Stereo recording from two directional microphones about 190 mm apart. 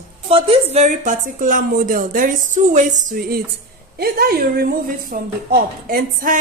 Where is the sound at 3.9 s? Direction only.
55° right (ahead or behind).